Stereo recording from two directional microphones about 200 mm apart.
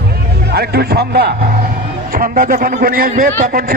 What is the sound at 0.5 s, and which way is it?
A man's voice, 55° right (ahead or behind).